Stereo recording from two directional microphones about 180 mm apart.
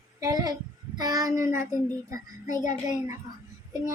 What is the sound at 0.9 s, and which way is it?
Child singing, 20° right (ahead or behind).